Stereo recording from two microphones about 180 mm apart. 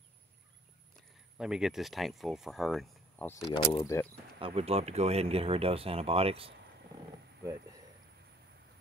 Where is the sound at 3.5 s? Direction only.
25° left (ahead or behind).